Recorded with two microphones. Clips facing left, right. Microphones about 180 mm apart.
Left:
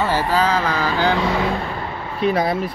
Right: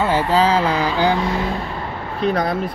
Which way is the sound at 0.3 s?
30° right (ahead or behind).